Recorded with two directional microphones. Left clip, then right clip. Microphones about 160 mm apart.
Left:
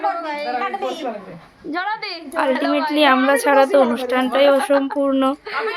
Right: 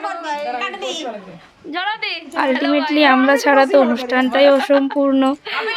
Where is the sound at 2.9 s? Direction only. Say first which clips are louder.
Right 2 dB; 20° right (ahead or behind).